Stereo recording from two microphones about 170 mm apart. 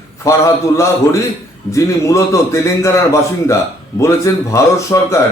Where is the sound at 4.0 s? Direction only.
15° left (ahead or behind).